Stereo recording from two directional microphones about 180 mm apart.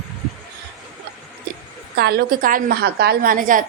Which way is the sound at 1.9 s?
60° right (ahead or behind).